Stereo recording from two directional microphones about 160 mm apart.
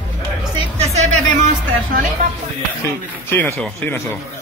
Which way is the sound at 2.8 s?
15° left (ahead or behind).